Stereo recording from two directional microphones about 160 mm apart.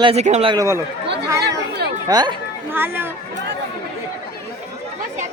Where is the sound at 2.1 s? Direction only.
25° right (ahead or behind).